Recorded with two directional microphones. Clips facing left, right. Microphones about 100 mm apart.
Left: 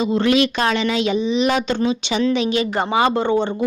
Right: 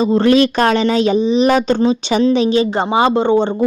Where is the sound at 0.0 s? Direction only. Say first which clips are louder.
Right 5 dB; 40° right (ahead or behind).